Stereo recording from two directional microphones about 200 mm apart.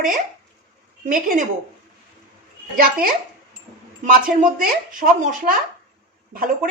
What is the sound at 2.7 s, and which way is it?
A woman's voice, 45° right (ahead or behind).